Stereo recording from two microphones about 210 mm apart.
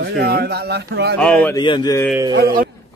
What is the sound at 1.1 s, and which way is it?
Speech, 5° left (ahead or behind).